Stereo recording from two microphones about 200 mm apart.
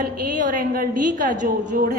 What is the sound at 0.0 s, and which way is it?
A woman's voice, 45° right (ahead or behind).